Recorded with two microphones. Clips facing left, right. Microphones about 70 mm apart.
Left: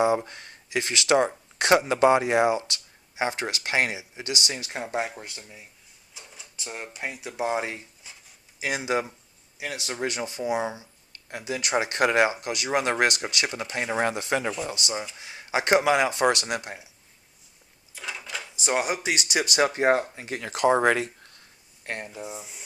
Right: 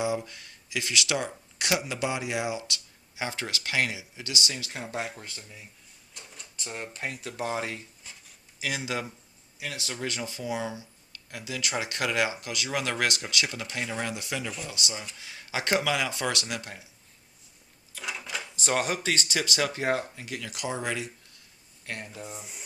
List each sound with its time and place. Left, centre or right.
0.0 s speech: left; by 5.6 s centre
6.1 s speech: centre; by 7.9 s left
8.1 s a sound: centre
8.6 s speech: left
18.0 s speech: centre; by 21.4 s left
21.9 s speech: left
22.2 s speech: centre